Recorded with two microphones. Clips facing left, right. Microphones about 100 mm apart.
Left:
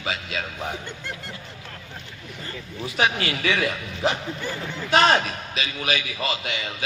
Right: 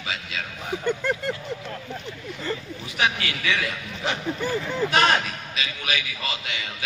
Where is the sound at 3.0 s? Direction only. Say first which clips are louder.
Left 2 dB; 35° left (ahead or behind).